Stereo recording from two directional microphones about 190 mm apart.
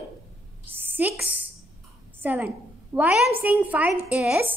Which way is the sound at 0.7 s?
10° right (ahead or behind).